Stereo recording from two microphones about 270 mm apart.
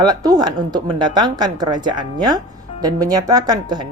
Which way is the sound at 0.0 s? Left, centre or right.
Centre.